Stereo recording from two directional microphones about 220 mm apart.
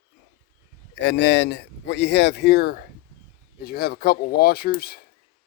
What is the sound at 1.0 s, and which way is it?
Speech, 55° left (ahead or behind).